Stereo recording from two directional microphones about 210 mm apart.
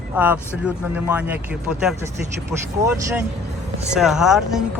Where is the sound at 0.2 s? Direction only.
10° right (ahead or behind).